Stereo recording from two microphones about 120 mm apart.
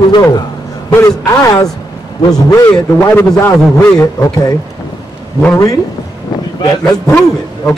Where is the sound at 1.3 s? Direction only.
30° left (ahead or behind).